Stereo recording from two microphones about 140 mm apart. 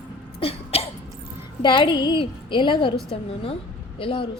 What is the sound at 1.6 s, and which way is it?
A woman's voice, 35° left (ahead or behind).